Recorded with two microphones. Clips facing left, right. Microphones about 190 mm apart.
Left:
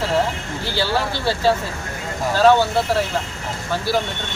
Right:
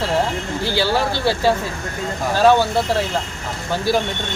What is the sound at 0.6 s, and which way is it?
Speech, 15° right (ahead or behind).